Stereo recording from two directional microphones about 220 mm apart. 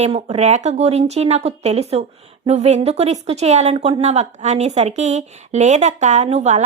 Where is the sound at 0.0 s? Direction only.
30° right (ahead or behind).